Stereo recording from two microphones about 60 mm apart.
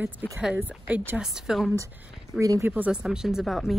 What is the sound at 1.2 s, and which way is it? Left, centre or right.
Speech, centre.